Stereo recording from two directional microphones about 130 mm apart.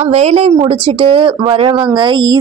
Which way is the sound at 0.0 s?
55° right (ahead or behind).